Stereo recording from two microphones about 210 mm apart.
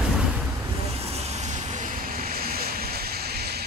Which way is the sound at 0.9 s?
30° right (ahead or behind).